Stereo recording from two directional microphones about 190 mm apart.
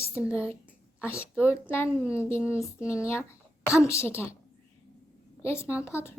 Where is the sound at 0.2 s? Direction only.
10° left (ahead or behind).